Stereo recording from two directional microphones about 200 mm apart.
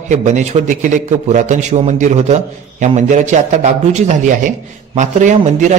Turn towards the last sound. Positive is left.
turn(degrees=-35)  # may be behind; listen again after turning